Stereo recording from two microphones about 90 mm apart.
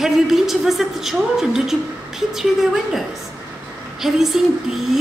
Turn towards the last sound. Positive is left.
turn(degrees=-5)  # may be behind; listen again after turning